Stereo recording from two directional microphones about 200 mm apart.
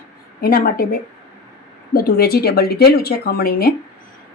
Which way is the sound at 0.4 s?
45° left (ahead or behind).